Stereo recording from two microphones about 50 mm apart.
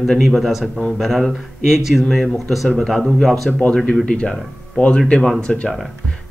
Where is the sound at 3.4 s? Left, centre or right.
Left.